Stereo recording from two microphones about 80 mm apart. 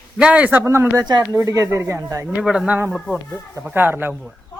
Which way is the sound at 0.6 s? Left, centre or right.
Right.